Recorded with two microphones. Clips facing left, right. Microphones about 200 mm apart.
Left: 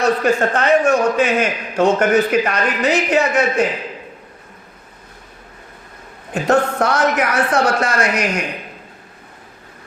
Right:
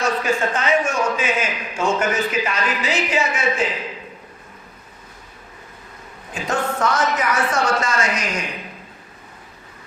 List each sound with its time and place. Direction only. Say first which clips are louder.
0.0 s a man's voice: left 5 dB; 60° left (ahead or behind)
6.3 s a man's voice: left 7 dB; 65° left (ahead or behind)